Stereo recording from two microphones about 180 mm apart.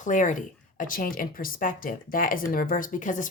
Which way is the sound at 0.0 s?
45° left (ahead or behind).